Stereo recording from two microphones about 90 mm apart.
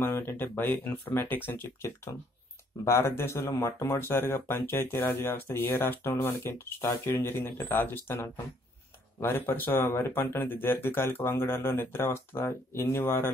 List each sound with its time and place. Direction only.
0.0 s speech: 25° left (ahead or behind)